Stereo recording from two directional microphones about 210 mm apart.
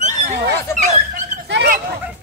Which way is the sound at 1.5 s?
55° right (ahead or behind).